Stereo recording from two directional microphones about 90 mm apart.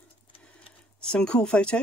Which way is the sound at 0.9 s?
10° left (ahead or behind).